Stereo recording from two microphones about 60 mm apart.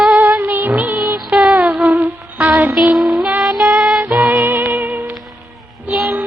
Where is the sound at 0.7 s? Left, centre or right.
Right.